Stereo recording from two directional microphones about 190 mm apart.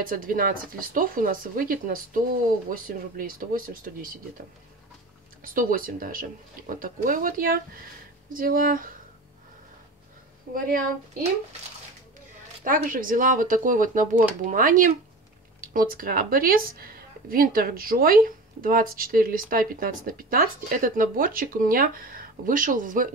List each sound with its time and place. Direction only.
0.0 s speech: 50° right (ahead or behind)
5.4 s speech: 45° right (ahead or behind)
10.5 s speech: 50° right (ahead or behind)
12.6 s speech: 45° right (ahead or behind)